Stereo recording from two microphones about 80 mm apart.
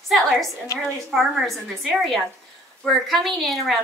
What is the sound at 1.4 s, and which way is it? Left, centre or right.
A woman's voice, centre.